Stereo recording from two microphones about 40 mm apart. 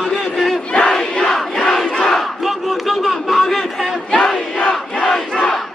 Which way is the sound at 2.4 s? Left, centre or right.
Centre.